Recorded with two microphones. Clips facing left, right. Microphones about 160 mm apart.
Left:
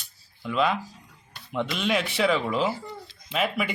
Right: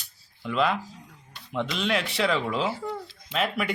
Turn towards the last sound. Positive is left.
turn(degrees=5)  # may be behind; listen again after turning